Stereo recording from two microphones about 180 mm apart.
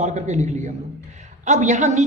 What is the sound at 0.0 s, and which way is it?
Speech, 40° right (ahead or behind).